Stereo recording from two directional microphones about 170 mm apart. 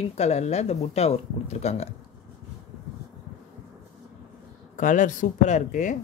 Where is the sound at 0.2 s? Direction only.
40° left (ahead or behind).